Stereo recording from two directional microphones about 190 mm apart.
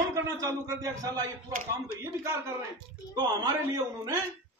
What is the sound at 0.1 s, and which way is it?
Speech, 15° right (ahead or behind).